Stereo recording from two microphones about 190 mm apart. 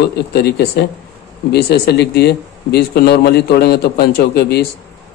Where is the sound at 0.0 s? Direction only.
60° left (ahead or behind).